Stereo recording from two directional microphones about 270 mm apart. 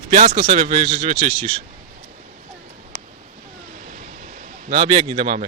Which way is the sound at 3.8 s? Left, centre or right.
Right.